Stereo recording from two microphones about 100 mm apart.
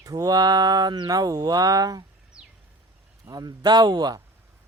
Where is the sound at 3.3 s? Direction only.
40° right (ahead or behind).